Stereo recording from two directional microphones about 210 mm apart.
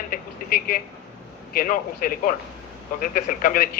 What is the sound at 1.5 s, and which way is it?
Speech, 40° left (ahead or behind).